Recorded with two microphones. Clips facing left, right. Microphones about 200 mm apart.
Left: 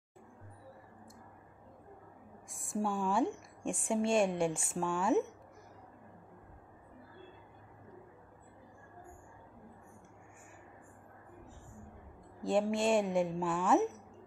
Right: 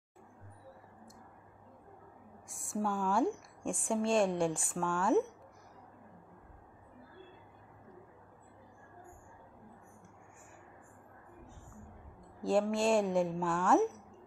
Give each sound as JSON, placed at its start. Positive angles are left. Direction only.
{"t": 2.4, "sound": "a woman's voice", "side_deg": 0}
{"t": 3.7, "sound": "a woman's voice", "side_deg": 25}
{"t": 4.3, "sound": "a woman's voice", "side_deg": 5}
{"t": 4.6, "sound": "a woman's voice", "side_deg": 25}
{"t": 5.0, "sound": "a woman's voice", "side_deg": 0}
{"t": 12.7, "sound": "a woman's voice", "side_deg": 0}